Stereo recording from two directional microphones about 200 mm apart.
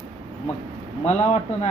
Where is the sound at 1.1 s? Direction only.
30° left (ahead or behind).